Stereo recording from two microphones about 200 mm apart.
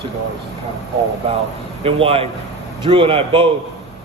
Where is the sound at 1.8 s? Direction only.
30° right (ahead or behind).